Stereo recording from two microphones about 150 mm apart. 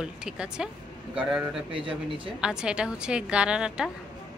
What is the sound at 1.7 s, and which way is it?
Speech, 35° right (ahead or behind).